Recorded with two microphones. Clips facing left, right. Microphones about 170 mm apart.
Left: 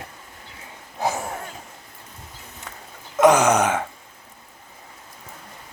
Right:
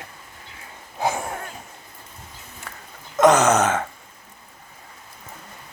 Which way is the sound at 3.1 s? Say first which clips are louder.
Even; 10° left (ahead or behind).